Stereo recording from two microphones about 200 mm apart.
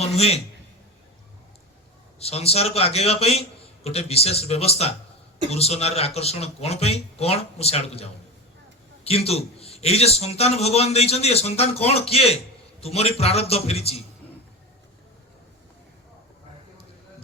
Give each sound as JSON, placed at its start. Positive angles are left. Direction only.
{"t": 0.0, "sound": "a man's voice", "side_deg": 30}
{"t": 2.1, "sound": "a man's voice", "side_deg": 30}
{"t": 9.0, "sound": "a man's voice", "side_deg": 30}